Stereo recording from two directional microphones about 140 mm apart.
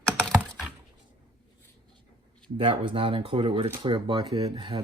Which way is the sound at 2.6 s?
40° right (ahead or behind).